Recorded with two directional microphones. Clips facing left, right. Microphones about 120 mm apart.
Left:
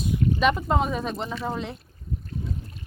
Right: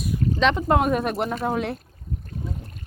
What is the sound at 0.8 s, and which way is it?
Speech, 60° right (ahead or behind).